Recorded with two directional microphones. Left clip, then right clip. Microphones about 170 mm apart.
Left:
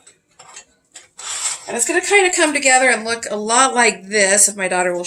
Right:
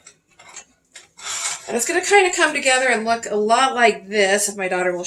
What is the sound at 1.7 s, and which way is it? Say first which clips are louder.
Speech: left 1 dB; 30° left (ahead or behind).